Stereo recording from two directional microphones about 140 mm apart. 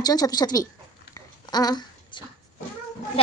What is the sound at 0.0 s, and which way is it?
Speech, 30° left (ahead or behind).